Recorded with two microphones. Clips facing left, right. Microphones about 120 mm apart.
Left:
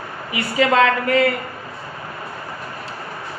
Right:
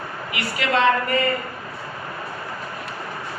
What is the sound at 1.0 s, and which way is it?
Speech, 90° left.